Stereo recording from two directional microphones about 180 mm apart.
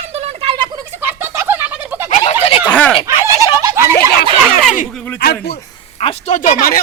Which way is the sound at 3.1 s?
15° right (ahead or behind).